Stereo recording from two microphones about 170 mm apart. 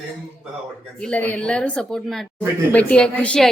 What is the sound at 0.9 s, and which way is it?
A woman's voice, 10° left (ahead or behind).